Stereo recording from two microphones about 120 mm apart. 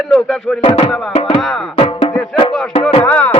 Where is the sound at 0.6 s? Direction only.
45° left (ahead or behind).